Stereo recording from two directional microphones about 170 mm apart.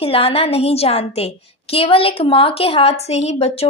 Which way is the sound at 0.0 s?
35° left (ahead or behind).